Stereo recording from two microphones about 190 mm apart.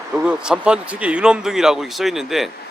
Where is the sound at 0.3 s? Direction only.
5° right (ahead or behind).